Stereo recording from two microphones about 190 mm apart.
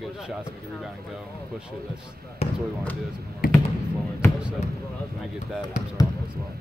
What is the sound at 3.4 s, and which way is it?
Basketball bounce, 50° left (ahead or behind).